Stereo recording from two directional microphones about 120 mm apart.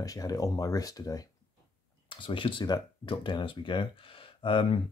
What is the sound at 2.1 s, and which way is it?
Speech, 45° left (ahead or behind).